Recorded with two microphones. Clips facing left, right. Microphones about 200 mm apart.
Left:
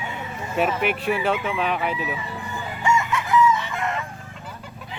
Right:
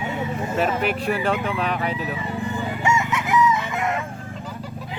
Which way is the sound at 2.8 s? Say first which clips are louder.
Left 2 dB; 20° right (ahead or behind).